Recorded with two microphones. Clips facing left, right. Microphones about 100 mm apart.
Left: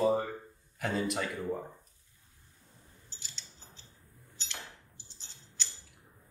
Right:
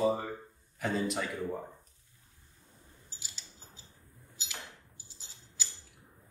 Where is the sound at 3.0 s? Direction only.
5° right (ahead or behind).